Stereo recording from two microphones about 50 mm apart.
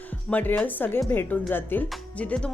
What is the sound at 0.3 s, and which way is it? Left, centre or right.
Speech, left.